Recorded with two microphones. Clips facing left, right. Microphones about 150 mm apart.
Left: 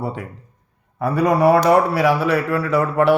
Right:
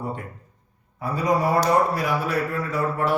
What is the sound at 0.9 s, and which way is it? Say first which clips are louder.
A man's voice: left 6 dB; 65° left (ahead or behind).